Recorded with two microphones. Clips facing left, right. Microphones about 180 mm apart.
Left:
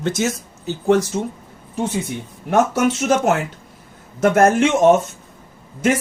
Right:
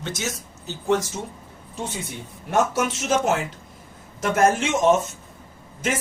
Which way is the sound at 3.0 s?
60° left (ahead or behind).